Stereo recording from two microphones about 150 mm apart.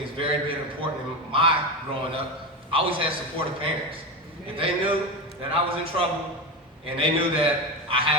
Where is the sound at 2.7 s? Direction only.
35° right (ahead or behind).